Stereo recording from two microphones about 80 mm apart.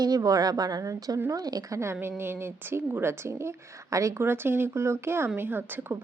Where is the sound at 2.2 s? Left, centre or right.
Right.